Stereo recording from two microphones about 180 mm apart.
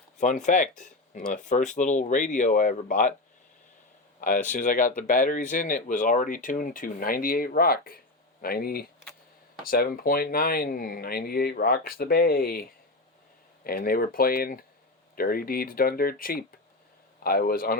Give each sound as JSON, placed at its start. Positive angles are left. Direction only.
{"t": 0.2, "sound": "speech", "side_deg": 40}
{"t": 4.2, "sound": "speech", "side_deg": 45}
{"t": 13.7, "sound": "speech", "side_deg": 55}